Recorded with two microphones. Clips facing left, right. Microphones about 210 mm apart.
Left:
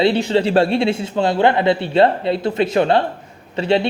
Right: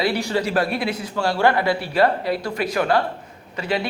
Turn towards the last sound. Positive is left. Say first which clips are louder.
# left 7 dB
turn(degrees=30)  # may be behind; listen again after turning